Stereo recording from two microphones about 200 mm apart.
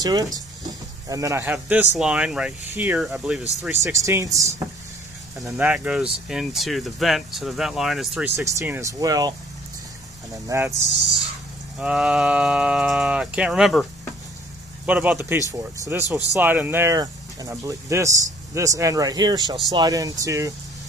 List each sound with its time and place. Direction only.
0.0 s speech: 20° right (ahead or behind); by 3.4 s 5° right (ahead or behind)
3.8 s speech: 15° right (ahead or behind)
8.4 s speech: 15° right (ahead or behind)
10.3 s speech: 15° right (ahead or behind)
11.8 s speech: 5° right (ahead or behind)
14.9 s speech: 5° right (ahead or behind)